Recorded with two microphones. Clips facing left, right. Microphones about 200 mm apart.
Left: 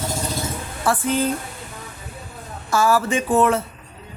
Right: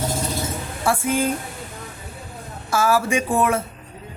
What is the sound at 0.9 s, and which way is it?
Speech, 10° right (ahead or behind).